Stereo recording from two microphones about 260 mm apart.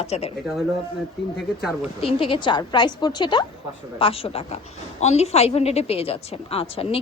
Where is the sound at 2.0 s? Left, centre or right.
Centre.